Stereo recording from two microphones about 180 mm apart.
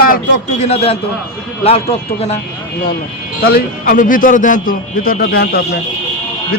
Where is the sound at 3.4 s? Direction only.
60° left (ahead or behind).